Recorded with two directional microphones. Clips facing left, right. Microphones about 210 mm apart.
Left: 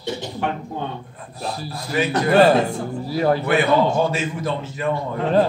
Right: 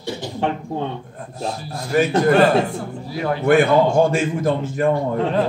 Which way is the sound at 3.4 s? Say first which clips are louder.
Right 3 dB; 50° right (ahead or behind).